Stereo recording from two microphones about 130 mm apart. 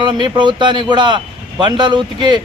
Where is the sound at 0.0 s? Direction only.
35° right (ahead or behind).